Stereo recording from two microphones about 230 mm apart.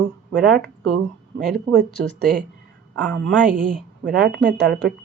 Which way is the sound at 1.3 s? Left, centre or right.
Centre.